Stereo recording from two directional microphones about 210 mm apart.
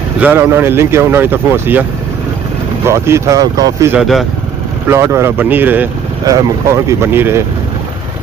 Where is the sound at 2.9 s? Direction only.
15° right (ahead or behind).